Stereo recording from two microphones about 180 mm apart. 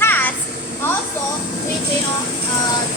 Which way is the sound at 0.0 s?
10° left (ahead or behind).